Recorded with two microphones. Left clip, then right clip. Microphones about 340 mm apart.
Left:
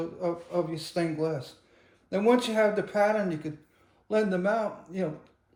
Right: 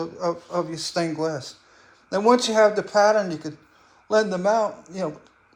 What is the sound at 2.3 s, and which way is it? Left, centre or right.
Speech, centre.